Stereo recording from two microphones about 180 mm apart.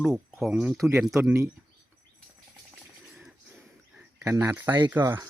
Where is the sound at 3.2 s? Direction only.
5° right (ahead or behind).